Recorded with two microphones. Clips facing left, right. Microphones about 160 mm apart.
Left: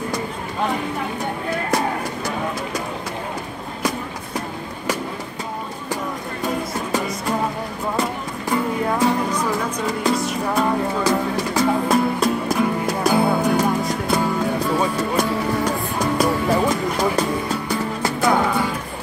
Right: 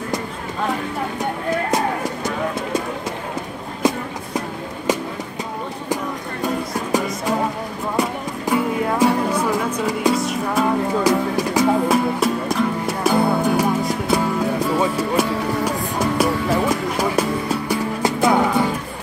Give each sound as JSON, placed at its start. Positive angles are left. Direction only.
{"t": 3.8, "sound": "a sound", "side_deg": -25}
{"t": 7.9, "sound": "music", "side_deg": -10}
{"t": 11.1, "sound": "music", "side_deg": -15}
{"t": 12.2, "sound": "music", "side_deg": 0}